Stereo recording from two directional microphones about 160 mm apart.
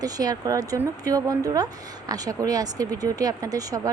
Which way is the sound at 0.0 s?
25° right (ahead or behind).